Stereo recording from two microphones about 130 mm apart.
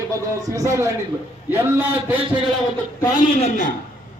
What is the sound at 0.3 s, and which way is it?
A man's voice, 25° right (ahead or behind).